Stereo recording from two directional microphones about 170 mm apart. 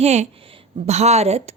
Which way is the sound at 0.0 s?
40° right (ahead or behind).